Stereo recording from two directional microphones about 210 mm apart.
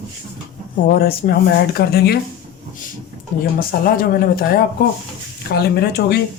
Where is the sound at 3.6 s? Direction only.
45° left (ahead or behind).